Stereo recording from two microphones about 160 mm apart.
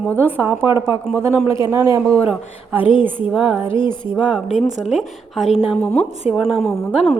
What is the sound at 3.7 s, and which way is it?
Speech, 30° left (ahead or behind).